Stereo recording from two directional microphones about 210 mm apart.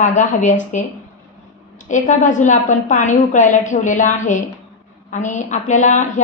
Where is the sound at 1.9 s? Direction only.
35° left (ahead or behind).